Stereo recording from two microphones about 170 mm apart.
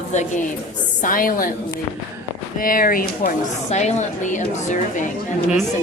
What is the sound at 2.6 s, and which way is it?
Speech, 55° left (ahead or behind).